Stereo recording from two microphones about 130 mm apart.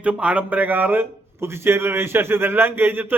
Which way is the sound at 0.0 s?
10° right (ahead or behind).